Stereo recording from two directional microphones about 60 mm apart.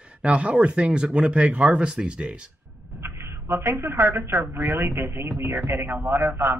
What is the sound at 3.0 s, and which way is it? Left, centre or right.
A woman's voice, right.